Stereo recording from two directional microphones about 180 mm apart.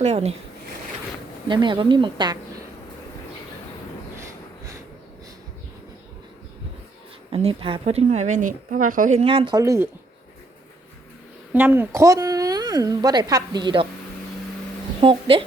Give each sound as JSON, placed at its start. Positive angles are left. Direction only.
{"t": 0.0, "sound": "speech", "side_deg": -35}
{"t": 1.5, "sound": "a woman's voice", "side_deg": -25}
{"t": 4.2, "sound": "a sound", "side_deg": -15}
{"t": 7.3, "sound": "speech", "side_deg": -30}
{"t": 9.6, "sound": "speech", "side_deg": -15}
{"t": 11.5, "sound": "a woman's voice", "side_deg": -10}
{"t": 15.0, "sound": "speech", "side_deg": -30}